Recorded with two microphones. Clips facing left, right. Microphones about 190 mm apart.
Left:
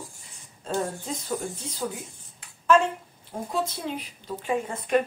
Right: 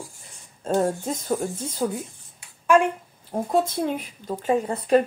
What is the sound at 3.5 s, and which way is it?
Speech, 50° right (ahead or behind).